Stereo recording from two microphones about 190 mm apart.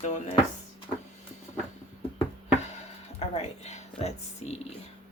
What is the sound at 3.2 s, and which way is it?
Speech, 35° left (ahead or behind).